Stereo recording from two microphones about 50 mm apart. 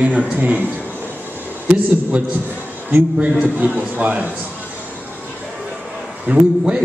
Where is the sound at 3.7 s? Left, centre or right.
Right.